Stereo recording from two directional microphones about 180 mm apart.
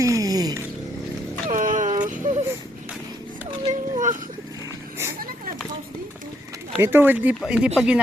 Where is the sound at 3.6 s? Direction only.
40° right (ahead or behind).